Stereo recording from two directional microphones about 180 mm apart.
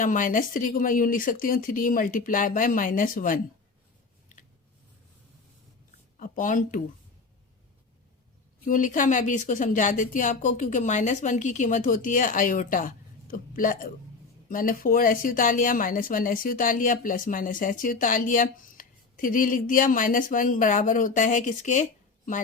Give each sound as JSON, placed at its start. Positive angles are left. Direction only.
{"t": 0.0, "sound": "speech", "side_deg": 45}
{"t": 6.1, "sound": "speech", "side_deg": 45}
{"t": 8.6, "sound": "speech", "side_deg": 45}